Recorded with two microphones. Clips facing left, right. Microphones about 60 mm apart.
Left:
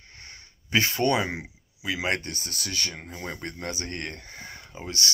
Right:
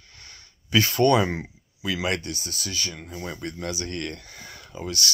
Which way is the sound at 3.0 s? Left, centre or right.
Left.